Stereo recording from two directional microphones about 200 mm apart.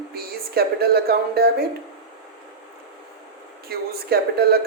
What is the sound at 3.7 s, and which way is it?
Speech, 50° right (ahead or behind).